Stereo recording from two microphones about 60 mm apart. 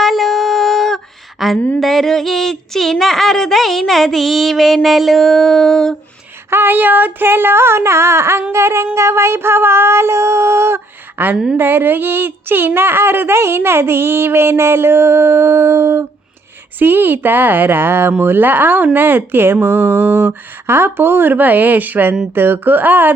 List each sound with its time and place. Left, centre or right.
0.0 s female singing: centre
1.8 s speech: centre
6.5 s speech: right
8.5 s a sound: right
11.2 s speech: right
16.7 s speech: right